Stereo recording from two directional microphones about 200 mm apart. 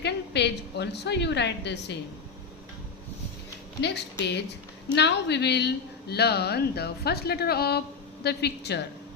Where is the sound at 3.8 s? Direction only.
60° left (ahead or behind).